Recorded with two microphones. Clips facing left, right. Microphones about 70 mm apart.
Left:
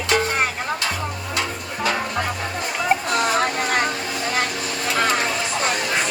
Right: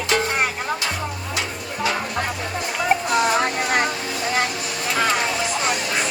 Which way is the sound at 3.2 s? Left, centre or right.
Centre.